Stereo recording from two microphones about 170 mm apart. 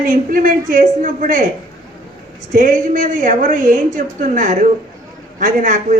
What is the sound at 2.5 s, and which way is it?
Speech, 50° right (ahead or behind).